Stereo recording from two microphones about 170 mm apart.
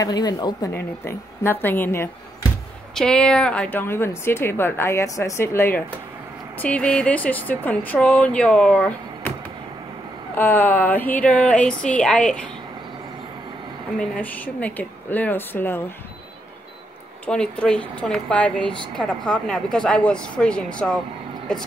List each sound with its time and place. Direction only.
0.0 s a woman's voice: 20° left (ahead or behind)
10.3 s a woman's voice: 10° left (ahead or behind)
13.9 s a woman's voice: 5° left (ahead or behind)
17.3 s a woman's voice: 5° left (ahead or behind)